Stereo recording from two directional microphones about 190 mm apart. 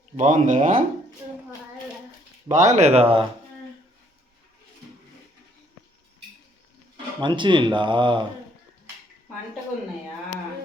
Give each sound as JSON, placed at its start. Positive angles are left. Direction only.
{"t": 0.2, "sound": "speech", "side_deg": -40}
{"t": 2.5, "sound": "speech", "side_deg": -40}
{"t": 6.9, "sound": "speech", "side_deg": -25}